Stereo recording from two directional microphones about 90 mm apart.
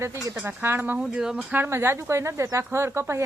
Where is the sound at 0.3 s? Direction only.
25° right (ahead or behind).